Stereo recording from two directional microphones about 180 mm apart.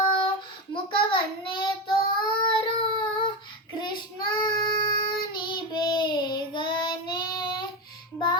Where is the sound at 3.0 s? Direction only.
25° left (ahead or behind).